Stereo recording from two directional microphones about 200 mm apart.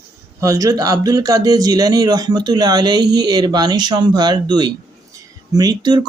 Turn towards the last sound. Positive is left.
turn(degrees=-20)  # may be behind; listen again after turning